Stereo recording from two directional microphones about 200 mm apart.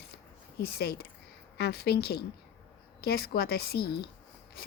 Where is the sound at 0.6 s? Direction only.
55° left (ahead or behind).